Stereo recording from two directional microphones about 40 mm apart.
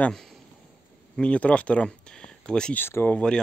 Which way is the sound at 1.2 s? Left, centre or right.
Left.